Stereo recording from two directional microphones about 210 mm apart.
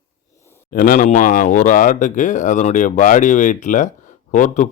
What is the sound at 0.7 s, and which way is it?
A man's voice, 40° left (ahead or behind).